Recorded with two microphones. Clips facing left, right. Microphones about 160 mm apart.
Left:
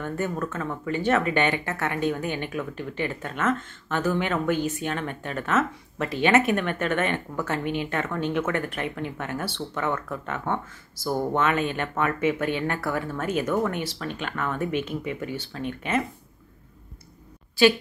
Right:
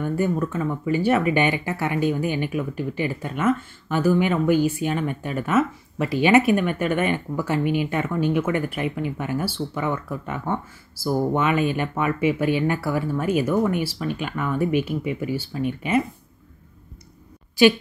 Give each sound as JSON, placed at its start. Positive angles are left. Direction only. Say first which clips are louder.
{"t": 0.0, "sound": "speech", "louder": "right 5 dB", "side_deg": -10}
{"t": 17.6, "sound": "a woman's voice", "louder": "right 3 dB", "side_deg": -15}